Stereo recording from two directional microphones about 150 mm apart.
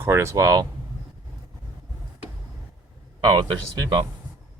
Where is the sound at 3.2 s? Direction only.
30° right (ahead or behind).